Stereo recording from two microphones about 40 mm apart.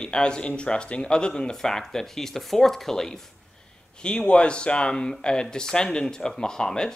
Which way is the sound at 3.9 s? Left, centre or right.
Left.